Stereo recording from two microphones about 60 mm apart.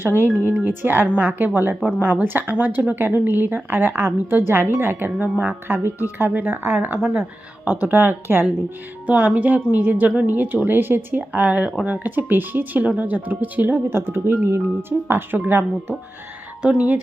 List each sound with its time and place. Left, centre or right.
0.0 s speech: right
9.0 s a woman's voice: right
16.6 s a woman's voice: right